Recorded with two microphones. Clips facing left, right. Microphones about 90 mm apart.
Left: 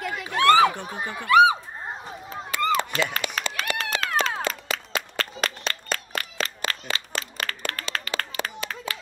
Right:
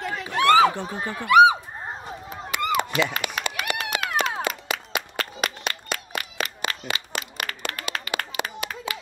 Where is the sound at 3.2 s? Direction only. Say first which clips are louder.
Right 1 dB; 15° right (ahead or behind).